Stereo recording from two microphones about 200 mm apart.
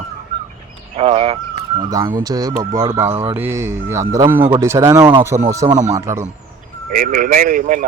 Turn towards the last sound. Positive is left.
turn(degrees=-40)  # may be behind; listen again after turning